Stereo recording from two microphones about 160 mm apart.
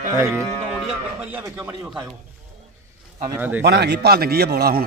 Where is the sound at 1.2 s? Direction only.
10° right (ahead or behind).